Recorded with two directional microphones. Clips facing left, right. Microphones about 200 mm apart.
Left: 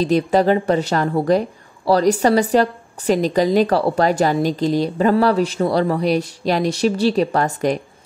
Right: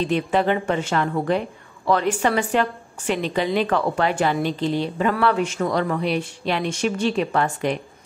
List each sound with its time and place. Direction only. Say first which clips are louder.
0.0 s a woman's voice: left 5 dB; 40° left (ahead or behind)